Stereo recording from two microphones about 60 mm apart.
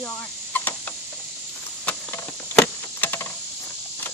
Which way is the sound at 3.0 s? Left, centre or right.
Left.